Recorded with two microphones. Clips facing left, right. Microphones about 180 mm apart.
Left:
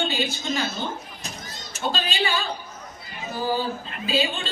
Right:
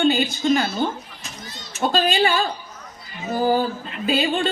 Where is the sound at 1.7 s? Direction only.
50° right (ahead or behind).